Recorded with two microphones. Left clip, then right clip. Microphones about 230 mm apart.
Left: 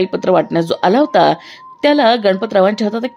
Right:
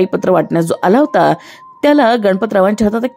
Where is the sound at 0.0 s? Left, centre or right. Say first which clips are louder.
Right 1 dB; right.